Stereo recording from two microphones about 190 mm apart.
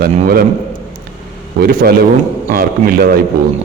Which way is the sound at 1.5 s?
55° right (ahead or behind).